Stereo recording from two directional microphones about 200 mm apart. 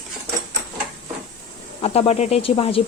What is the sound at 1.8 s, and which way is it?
Speech, 30° left (ahead or behind).